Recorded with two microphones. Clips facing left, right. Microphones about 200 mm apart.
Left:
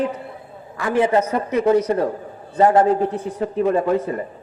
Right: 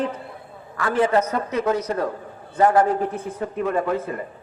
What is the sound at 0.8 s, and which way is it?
A man's voice, 15° left (ahead or behind).